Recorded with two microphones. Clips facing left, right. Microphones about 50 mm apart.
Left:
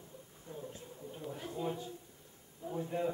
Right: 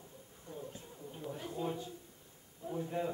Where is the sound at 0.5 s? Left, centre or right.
Left.